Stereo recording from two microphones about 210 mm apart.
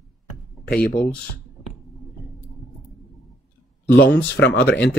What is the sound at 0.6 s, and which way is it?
Speech, 45° left (ahead or behind).